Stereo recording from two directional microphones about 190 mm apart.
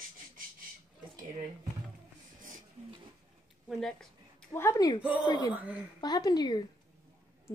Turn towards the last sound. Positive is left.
turn(degrees=20)  # may be behind; listen again after turning